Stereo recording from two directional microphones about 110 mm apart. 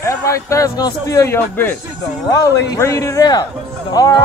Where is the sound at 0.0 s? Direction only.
30° left (ahead or behind).